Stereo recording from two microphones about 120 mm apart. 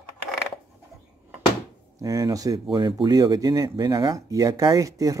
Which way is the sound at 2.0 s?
30° right (ahead or behind).